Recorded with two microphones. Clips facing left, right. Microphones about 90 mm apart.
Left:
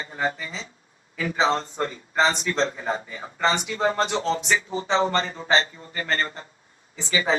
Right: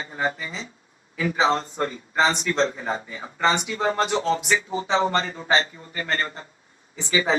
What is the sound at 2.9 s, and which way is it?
Music, 30° right (ahead or behind).